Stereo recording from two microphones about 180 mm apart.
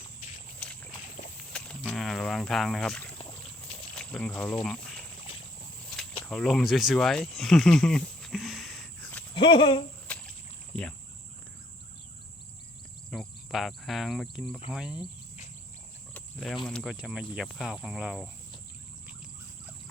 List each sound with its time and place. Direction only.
0.6 s a sound: 5° left (ahead or behind)
1.5 s speech: 5° left (ahead or behind)
5.9 s a sound: 5° left (ahead or behind)
9.3 s speech: 25° left (ahead or behind)
10.1 s rowboat: 10° left (ahead or behind)
13.1 s cricket: centre (ahead or behind)
14.7 s speech: 5° right (ahead or behind)
16.1 s cricket: 5° left (ahead or behind)
16.6 s speech: centre (ahead or behind)